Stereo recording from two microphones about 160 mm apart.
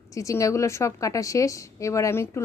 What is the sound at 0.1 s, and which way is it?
A woman's voice, 20° left (ahead or behind).